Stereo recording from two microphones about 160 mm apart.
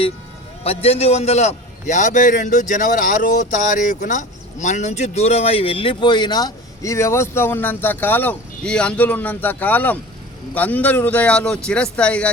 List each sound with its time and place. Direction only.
0.6 s a man's voice: 40° left (ahead or behind); by 12.3 s 5° left (ahead or behind)